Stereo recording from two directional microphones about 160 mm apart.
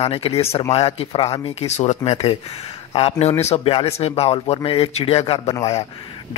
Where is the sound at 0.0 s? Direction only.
40° left (ahead or behind).